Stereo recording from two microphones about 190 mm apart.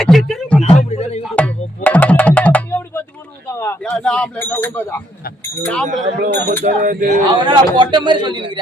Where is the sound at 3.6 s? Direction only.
10° left (ahead or behind).